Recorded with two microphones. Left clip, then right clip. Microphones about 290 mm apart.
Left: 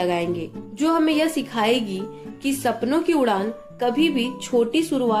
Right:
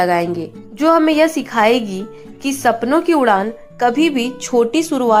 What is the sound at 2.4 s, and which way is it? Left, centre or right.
A woman's voice, centre.